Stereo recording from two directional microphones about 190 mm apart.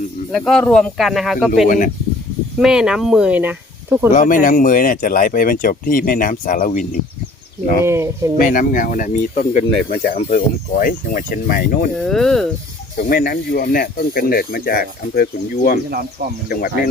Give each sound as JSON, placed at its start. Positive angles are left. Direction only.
{"t": 0.3, "sound": "speech", "side_deg": 0}
{"t": 1.6, "sound": "speech", "side_deg": 45}
{"t": 2.6, "sound": "speech", "side_deg": -5}
{"t": 4.1, "sound": "speech", "side_deg": 45}
{"t": 7.9, "sound": "speech", "side_deg": -15}
{"t": 8.4, "sound": "speech", "side_deg": 45}
{"t": 11.9, "sound": "speech", "side_deg": 0}
{"t": 13.0, "sound": "speech", "side_deg": 50}